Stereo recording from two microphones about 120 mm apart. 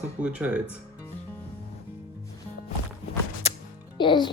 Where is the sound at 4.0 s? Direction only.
40° left (ahead or behind).